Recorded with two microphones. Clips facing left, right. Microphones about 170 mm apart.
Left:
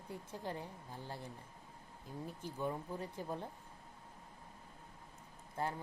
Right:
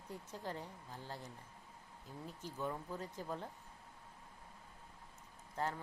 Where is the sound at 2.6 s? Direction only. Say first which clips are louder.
Left 2 dB; 15° left (ahead or behind).